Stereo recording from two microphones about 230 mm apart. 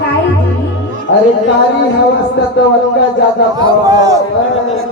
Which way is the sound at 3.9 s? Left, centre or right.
Centre.